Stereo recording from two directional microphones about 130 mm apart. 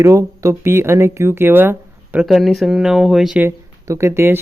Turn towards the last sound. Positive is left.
turn(degrees=-20)  # may be behind; listen again after turning